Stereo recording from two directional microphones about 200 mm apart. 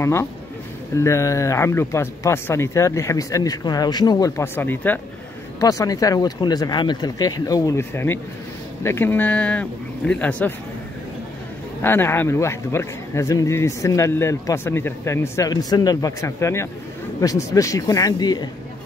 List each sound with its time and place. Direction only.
0.0 s a man's voice: 15° left (ahead or behind)
11.8 s a man's voice: 10° left (ahead or behind)